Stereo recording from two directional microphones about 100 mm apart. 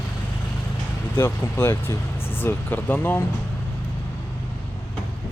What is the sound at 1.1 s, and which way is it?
Speech, 25° left (ahead or behind).